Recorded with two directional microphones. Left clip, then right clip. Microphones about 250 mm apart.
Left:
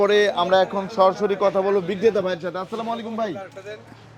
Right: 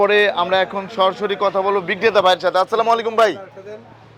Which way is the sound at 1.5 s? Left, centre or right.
Right.